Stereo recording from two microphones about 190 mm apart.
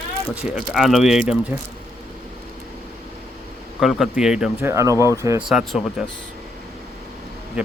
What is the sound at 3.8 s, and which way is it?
Speech, centre (ahead or behind).